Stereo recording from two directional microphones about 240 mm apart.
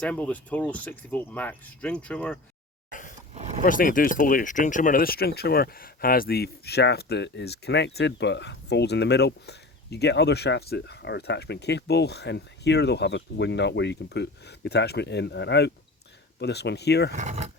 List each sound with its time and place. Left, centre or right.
0.0 s speech: centre
2.9 s a sound: left
3.6 s speech: left
17.2 s speech: right